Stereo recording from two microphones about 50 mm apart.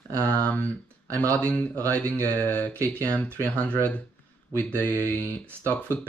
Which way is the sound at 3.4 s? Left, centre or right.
Left.